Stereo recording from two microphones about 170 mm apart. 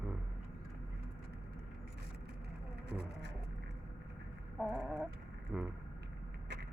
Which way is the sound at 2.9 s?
75° right (ahead or behind).